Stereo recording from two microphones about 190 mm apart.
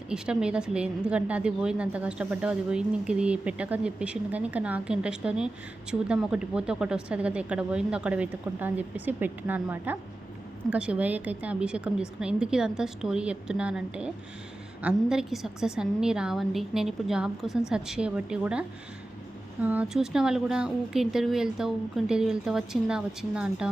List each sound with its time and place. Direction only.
0.1 s a woman's voice: 5° right (ahead or behind)
19.6 s a woman's voice: 5° right (ahead or behind)